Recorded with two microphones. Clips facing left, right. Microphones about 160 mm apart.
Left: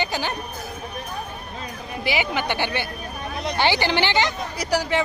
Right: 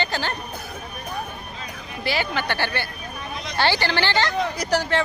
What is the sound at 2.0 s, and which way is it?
Speech, 15° left (ahead or behind).